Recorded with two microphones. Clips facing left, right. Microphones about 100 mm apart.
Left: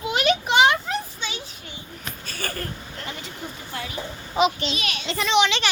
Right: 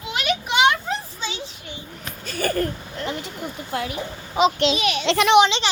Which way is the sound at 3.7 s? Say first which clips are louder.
Right 8 dB; 60° right (ahead or behind).